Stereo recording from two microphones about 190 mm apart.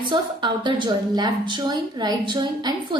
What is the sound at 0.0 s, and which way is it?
A woman's voice, 25° right (ahead or behind).